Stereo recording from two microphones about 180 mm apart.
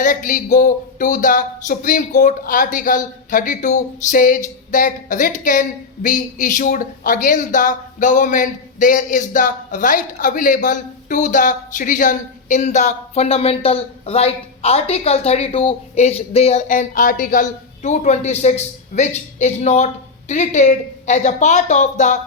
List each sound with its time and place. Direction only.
0.0 s speech: 45° left (ahead or behind)